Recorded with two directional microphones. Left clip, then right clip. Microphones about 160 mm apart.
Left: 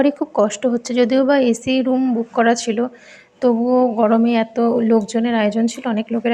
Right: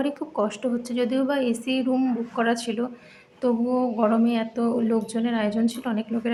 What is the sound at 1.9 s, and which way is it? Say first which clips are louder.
Speech: left 6 dB; 25° left (ahead or behind).